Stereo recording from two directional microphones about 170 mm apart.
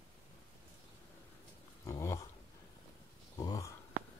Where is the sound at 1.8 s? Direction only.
20° left (ahead or behind).